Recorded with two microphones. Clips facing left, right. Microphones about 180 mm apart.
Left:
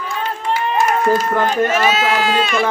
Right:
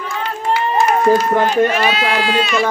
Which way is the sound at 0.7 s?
20° right (ahead or behind).